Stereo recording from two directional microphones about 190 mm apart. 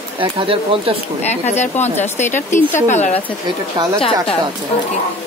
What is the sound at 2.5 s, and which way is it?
Speech, 10° left (ahead or behind).